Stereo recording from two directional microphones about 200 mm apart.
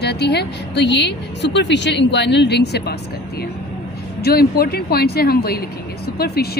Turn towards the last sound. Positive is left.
turn(degrees=50)  # may be behind; listen again after turning